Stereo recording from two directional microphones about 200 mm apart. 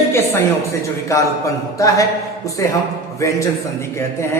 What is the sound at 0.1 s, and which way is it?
A man's voice, 15° left (ahead or behind).